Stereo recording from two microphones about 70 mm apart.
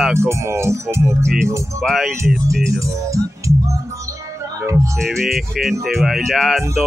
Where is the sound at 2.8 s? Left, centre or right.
Right.